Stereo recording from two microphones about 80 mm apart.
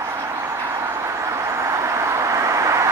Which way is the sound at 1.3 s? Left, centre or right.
Right.